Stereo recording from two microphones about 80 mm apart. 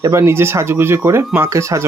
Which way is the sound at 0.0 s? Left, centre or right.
Right.